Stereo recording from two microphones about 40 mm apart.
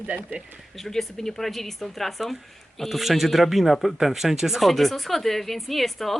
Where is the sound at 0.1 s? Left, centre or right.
Right.